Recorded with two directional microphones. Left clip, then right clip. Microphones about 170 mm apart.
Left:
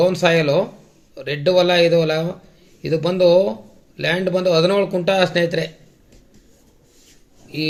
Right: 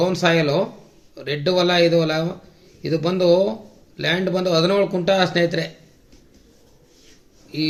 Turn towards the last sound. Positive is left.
turn(degrees=35)  # may be behind; listen again after turning